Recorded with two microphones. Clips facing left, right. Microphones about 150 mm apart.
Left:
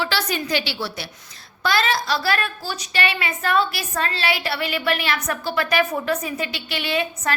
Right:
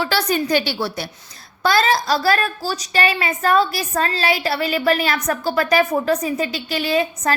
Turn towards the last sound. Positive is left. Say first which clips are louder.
# right 4 dB
turn(degrees=-35)  # may be behind; listen again after turning